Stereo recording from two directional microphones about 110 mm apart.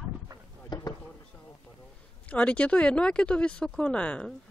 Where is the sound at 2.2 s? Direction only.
10° left (ahead or behind).